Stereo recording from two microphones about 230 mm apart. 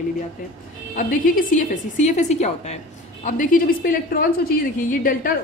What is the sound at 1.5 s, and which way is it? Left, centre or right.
A woman's voice, left.